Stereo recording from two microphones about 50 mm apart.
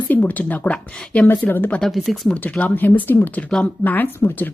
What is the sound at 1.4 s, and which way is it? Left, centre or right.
Speech, left.